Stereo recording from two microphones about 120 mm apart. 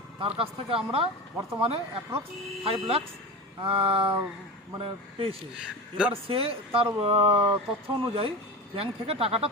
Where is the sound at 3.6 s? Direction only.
50° right (ahead or behind).